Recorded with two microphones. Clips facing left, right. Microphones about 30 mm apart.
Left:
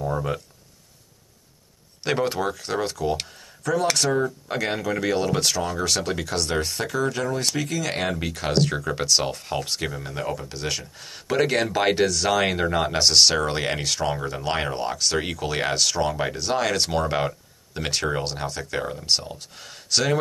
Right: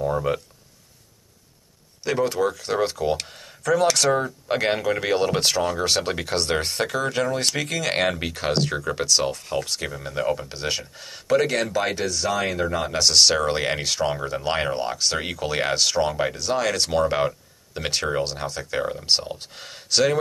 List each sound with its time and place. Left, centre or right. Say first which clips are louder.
0.0 s a sound: right 3 dB; centre
2.0 s speech: right 1 dB; left
2.3 s speech: right 3 dB; centre
3.3 s speech: right 3 dB; right
4.1 s speech: right 2 dB; right
8.2 s speech: left 1 dB; centre
11.1 s speech: right 2 dB; centre
11.9 s speech: left 4 dB; left
12.6 s speech: left 1 dB; centre
19.3 s speech: right 2 dB; right
19.9 s speech: right 2 dB; centre